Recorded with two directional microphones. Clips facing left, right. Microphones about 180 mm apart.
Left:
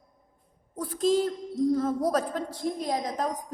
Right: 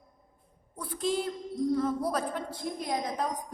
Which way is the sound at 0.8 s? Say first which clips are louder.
Left 6 dB; 40° left (ahead or behind).